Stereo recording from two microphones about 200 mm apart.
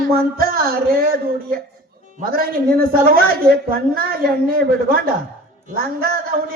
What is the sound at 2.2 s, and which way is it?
A woman's voice, 45° right (ahead or behind).